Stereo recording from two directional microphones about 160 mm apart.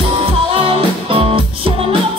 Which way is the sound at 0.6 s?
35° right (ahead or behind).